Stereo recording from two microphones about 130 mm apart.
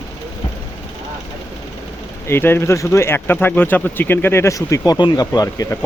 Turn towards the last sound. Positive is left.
turn(degrees=25)  # may be behind; listen again after turning